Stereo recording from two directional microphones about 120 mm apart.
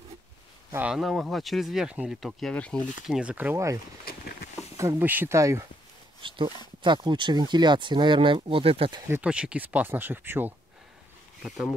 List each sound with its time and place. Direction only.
0.7 s speech: 10° right (ahead or behind)
2.5 s speech: 10° left (ahead or behind)
3.1 s speech: 10° right (ahead or behind)
3.5 s speech: 25° right (ahead or behind)
6.2 s speech: 45° right (ahead or behind)
9.2 s speech: 10° right (ahead or behind)
11.4 s speech: centre (ahead or behind)